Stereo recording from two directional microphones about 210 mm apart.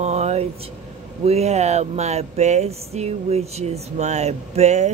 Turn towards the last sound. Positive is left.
turn(degrees=-30)  # may be behind; listen again after turning